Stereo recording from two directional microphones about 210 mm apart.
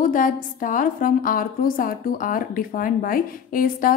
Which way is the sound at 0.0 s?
40° left (ahead or behind).